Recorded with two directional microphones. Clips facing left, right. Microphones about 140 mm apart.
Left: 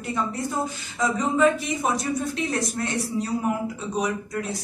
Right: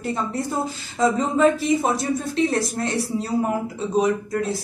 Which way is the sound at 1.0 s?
30° right (ahead or behind).